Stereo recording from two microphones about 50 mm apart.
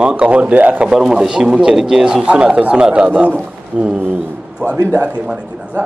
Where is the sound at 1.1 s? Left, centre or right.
Centre; by 5.2 s right.